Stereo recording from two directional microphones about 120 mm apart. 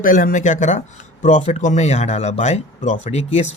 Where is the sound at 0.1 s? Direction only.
90° left.